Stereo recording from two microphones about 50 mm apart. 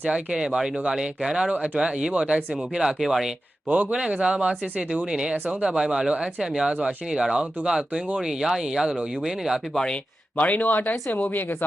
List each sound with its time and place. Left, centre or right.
0.1 s speech: centre
3.7 s speech: right
3.9 s speech: centre
9.7 s speech: centre
10.3 s speech: left